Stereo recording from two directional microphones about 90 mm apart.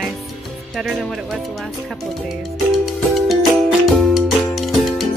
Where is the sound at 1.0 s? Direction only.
Centre (ahead or behind).